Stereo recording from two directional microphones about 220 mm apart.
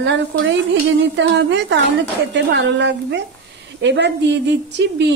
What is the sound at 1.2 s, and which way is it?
A woman's voice, 55° right (ahead or behind).